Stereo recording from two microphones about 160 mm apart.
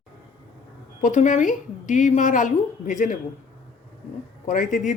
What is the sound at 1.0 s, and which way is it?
A woman's voice, 50° left (ahead or behind).